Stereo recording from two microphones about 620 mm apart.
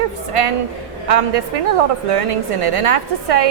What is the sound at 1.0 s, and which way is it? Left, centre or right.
A woman's voice, right.